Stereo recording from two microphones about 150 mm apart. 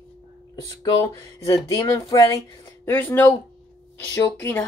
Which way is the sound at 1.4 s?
20° left (ahead or behind).